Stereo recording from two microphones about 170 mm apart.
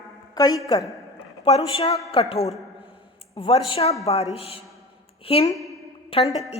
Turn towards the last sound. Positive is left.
turn(degrees=30)  # may be behind; listen again after turning